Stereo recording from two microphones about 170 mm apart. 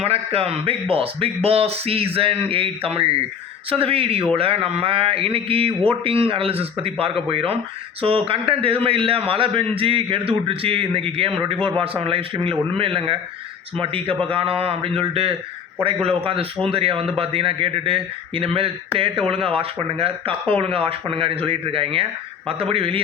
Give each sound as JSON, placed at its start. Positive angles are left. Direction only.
{"t": 0.0, "sound": "a man's voice", "side_deg": -35}